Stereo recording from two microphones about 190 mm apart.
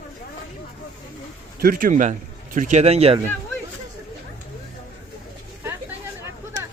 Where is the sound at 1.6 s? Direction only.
50° right (ahead or behind); by 3.2 s 35° right (ahead or behind).